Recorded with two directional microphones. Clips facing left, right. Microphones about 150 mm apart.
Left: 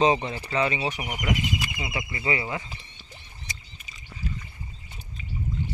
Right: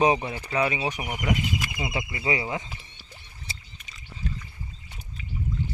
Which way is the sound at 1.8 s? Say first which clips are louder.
Right 2 dB; 20° right (ahead or behind).